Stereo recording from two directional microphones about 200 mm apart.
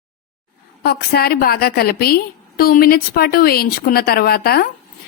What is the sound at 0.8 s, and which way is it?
Speech, 50° left (ahead or behind).